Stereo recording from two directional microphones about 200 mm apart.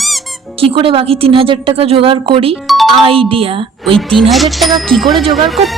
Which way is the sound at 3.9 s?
Centre (ahead or behind).